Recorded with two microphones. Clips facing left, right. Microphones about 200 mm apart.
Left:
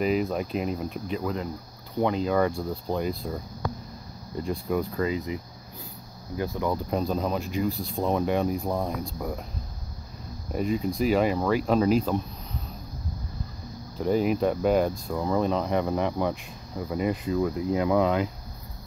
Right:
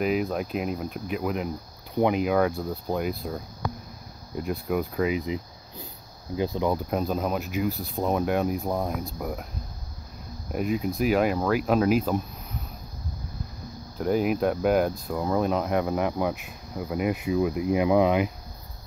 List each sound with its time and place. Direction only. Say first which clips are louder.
0.0 s speech: even; centre (ahead or behind)
2.3 s speech: right 1 dB; 5° right (ahead or behind)
6.9 s speech: even; 5° right (ahead or behind)
10.5 s speech: even; 5° right (ahead or behind)
13.9 s speech: even; 5° right (ahead or behind)